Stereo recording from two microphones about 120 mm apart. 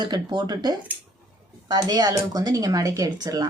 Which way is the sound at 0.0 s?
35° right (ahead or behind).